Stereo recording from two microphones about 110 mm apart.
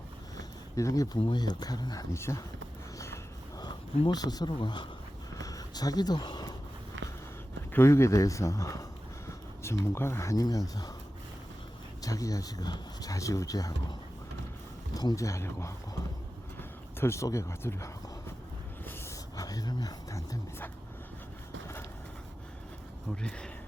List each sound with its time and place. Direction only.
0.3 s a sound: 30° left (ahead or behind)
1.2 s speech: 45° left (ahead or behind)
2.1 s speech: 25° left (ahead or behind)
3.6 s speech: 40° left (ahead or behind)
5.4 s a sound: 35° left (ahead or behind)
7.7 s speech: 25° left (ahead or behind)
12.0 s speech: 30° left (ahead or behind)
14.9 s speech: 30° left (ahead or behind)
19.4 s speech: 35° left (ahead or behind)